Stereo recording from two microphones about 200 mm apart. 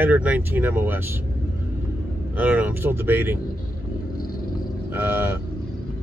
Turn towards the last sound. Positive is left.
turn(degrees=-10)  # may be behind; listen again after turning